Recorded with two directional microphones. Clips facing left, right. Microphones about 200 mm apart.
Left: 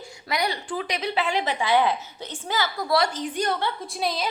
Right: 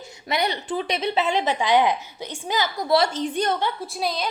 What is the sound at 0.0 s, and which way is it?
A woman's voice, 20° right (ahead or behind).